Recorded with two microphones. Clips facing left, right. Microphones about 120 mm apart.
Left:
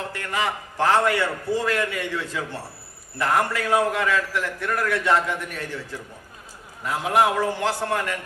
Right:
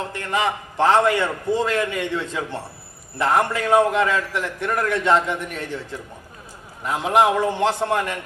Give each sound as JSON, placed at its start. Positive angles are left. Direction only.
{"t": 0.1, "sound": "a man's voice", "side_deg": -25}
{"t": 6.8, "sound": "a man's voice", "side_deg": -20}